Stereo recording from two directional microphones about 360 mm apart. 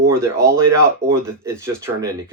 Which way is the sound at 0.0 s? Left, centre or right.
Centre.